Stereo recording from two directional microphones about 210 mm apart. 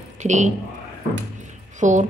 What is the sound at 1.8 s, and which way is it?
Speech, 35° right (ahead or behind).